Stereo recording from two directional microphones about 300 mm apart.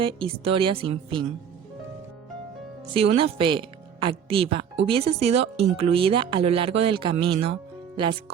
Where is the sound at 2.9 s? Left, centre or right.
Centre.